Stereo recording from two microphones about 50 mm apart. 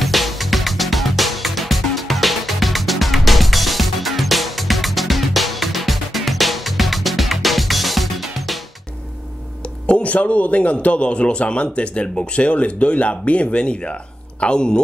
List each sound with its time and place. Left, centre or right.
0.0 s music: centre
9.8 s a sound: left
10.1 s a man's voice: left